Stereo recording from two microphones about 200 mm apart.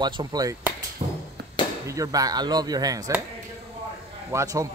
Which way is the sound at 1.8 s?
15° right (ahead or behind).